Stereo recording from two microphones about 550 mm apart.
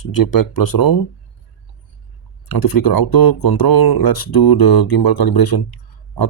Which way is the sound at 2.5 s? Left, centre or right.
Left.